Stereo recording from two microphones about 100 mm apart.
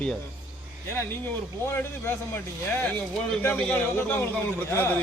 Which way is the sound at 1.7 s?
20° left (ahead or behind).